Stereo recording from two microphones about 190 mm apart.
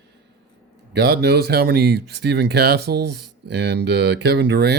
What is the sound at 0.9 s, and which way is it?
Speech, 60° right (ahead or behind).